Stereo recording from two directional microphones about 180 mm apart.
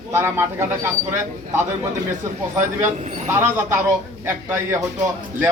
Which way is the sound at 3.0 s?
40° right (ahead or behind).